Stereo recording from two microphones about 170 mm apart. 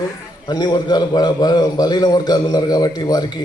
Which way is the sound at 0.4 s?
25° left (ahead or behind).